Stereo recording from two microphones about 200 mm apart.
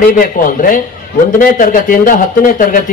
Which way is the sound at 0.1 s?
45° left (ahead or behind).